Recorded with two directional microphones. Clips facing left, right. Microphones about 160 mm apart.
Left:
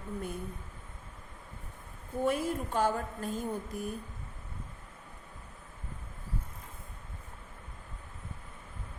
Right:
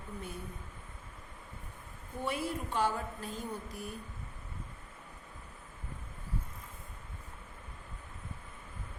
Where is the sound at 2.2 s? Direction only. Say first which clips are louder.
Left 5 dB; 45° left (ahead or behind).